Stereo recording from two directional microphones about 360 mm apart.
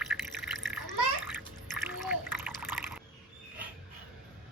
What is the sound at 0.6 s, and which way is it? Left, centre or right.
Water, centre.